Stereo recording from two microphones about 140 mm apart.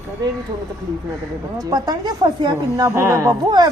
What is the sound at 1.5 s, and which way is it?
A woman's voice, 25° right (ahead or behind).